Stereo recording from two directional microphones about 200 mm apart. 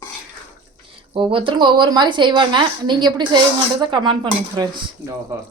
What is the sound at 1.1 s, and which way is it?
A woman's voice, 25° right (ahead or behind).